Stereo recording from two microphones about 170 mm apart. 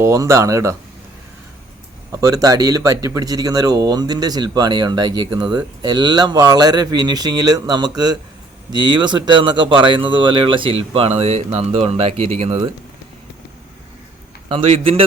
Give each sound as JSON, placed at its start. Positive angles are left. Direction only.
{"t": 0.0, "sound": "speech", "side_deg": -20}
{"t": 2.1, "sound": "speech", "side_deg": -20}
{"t": 14.5, "sound": "a man's voice", "side_deg": -35}